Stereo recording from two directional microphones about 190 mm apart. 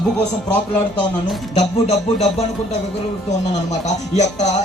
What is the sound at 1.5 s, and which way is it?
Speech, 35° left (ahead or behind).